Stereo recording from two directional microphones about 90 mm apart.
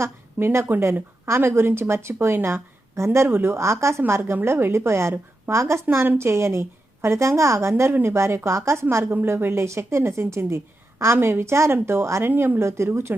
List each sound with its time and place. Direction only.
0.0 s a woman's voice: 30° right (ahead or behind)